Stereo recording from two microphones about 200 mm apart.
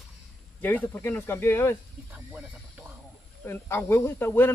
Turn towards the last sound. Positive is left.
turn(degrees=10)  # may be behind; listen again after turning